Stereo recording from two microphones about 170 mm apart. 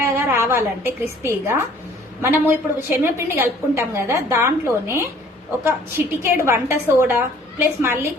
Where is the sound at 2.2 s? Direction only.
15° right (ahead or behind).